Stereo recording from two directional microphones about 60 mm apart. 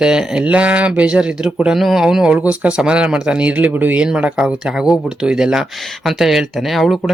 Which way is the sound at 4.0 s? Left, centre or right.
Centre.